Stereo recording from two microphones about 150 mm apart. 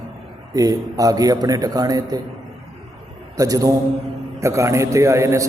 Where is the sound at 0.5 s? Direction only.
25° right (ahead or behind).